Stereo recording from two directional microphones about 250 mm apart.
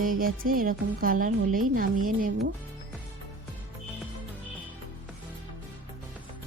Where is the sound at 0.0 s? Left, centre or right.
Right.